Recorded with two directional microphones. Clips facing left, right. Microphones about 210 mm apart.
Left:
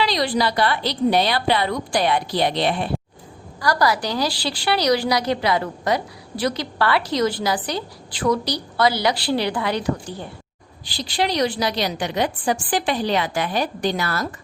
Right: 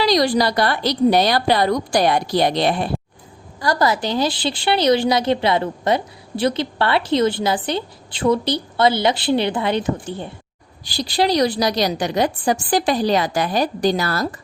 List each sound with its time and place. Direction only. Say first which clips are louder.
0.0 s a woman's voice: right 4 dB; 40° right (ahead or behind)
3.6 s a woman's voice: right 1 dB; 25° right (ahead or behind)
10.8 s a woman's voice: right 4 dB; 40° right (ahead or behind)